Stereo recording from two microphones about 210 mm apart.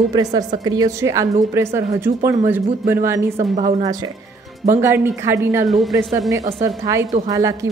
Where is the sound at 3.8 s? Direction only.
20° right (ahead or behind).